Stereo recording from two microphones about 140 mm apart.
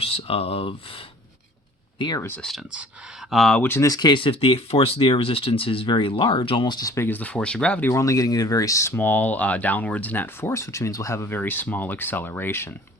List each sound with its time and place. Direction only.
0.0 s speech: 45° left (ahead or behind)
2.0 s speech: 30° left (ahead or behind)
2.2 s speech: 10° left (ahead or behind)
2.5 s speech: centre (ahead or behind)
3.6 s speech: 20° left (ahead or behind)